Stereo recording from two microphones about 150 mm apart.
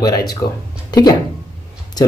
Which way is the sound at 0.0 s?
25° left (ahead or behind).